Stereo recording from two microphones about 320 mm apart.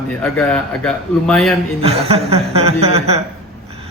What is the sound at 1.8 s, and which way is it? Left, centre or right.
Speech, centre.